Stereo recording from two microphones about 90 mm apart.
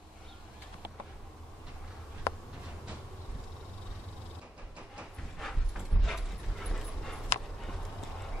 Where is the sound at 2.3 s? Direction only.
30° left (ahead or behind).